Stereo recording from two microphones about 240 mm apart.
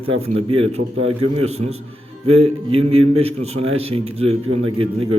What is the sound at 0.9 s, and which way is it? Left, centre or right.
Speech, right.